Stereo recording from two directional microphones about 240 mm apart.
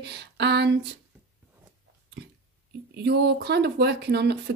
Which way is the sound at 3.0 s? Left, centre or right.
Right.